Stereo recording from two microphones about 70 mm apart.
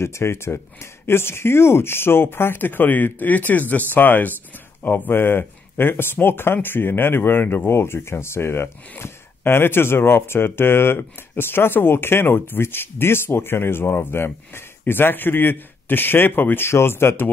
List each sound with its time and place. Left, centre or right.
0.0 s speech: left